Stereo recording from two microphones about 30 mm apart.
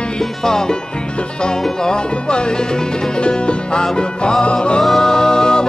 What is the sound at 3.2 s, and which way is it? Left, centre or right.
Music, left.